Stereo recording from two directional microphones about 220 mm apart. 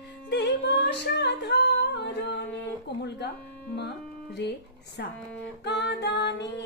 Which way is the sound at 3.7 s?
50° left (ahead or behind).